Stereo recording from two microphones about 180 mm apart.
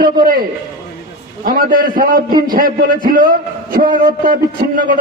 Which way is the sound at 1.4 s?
50° right (ahead or behind).